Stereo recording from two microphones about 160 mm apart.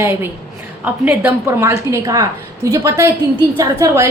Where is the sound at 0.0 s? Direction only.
15° right (ahead or behind).